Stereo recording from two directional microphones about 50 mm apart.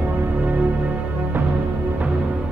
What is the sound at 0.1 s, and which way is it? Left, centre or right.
Music, right.